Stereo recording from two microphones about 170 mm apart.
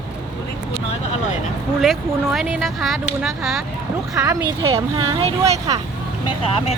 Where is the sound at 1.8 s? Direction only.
Centre (ahead or behind).